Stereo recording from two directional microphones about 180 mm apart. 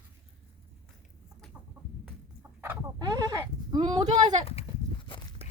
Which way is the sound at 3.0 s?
20° right (ahead or behind).